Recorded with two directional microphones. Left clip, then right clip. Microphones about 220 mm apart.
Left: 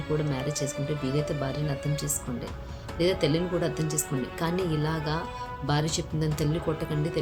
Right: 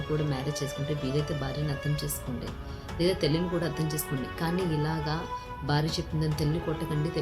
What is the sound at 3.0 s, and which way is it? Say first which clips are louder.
Speech: left 2 dB; 10° left (ahead or behind).